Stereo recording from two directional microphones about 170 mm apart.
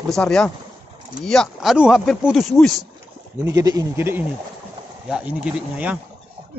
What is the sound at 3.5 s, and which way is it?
Speech, 20° right (ahead or behind).